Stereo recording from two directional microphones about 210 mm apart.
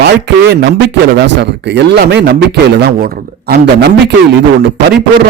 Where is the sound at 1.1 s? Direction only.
55° right (ahead or behind).